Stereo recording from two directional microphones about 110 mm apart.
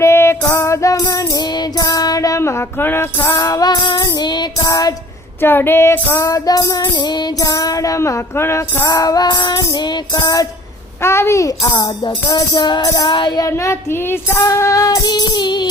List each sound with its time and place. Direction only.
0.0 s music: 25° left (ahead or behind)
3.3 s music: 35° left (ahead or behind)
5.4 s music: 20° left (ahead or behind); by 10.4 s 35° left (ahead or behind)
11.0 s a child's voice: 25° left (ahead or behind)
12.0 s music: 40° left (ahead or behind)
13.4 s music: 25° left (ahead or behind); by 15.7 s 40° left (ahead or behind)